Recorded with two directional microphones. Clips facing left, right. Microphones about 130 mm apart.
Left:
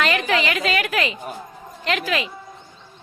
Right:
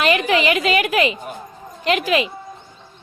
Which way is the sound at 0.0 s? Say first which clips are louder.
Right 4 dB; 15° right (ahead or behind).